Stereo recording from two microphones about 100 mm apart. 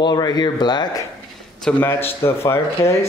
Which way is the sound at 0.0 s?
40° left (ahead or behind).